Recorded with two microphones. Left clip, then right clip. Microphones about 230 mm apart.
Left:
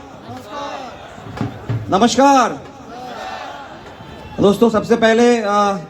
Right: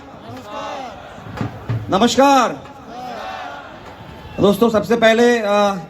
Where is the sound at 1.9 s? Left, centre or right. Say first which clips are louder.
Left 1 dB; right.